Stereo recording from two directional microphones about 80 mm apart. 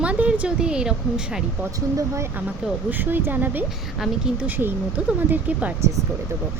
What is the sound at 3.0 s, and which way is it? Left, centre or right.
Speech, right.